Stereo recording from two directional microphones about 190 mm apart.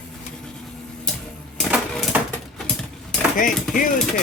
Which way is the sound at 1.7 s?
10° right (ahead or behind).